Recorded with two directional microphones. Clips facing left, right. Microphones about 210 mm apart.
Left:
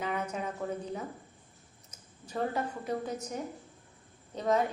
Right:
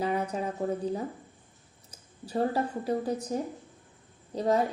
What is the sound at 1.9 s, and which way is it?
A woman's voice, 35° right (ahead or behind).